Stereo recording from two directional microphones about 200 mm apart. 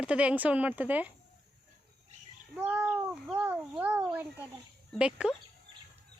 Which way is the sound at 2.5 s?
5° right (ahead or behind).